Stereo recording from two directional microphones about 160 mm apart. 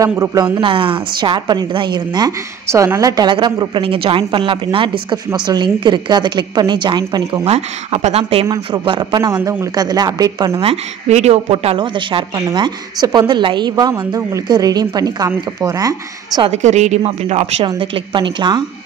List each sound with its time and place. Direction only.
0.0 s speech: 20° right (ahead or behind)
7.4 s a woman's voice: 40° right (ahead or behind)
9.3 s speech: 15° right (ahead or behind)
10.6 s speech: 40° right (ahead or behind); by 16.4 s 25° right (ahead or behind)
16.4 s a woman's voice: 45° right (ahead or behind)
17.6 s speech: 30° right (ahead or behind)